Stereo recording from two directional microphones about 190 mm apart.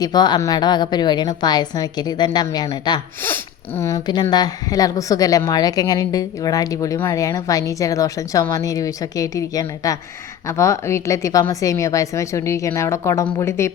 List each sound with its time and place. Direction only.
0.0 s a woman's voice: 20° left (ahead or behind)
3.2 s a woman's voice: 10° left (ahead or behind)